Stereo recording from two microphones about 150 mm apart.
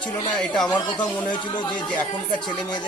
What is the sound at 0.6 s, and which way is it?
Speech, 25° left (ahead or behind).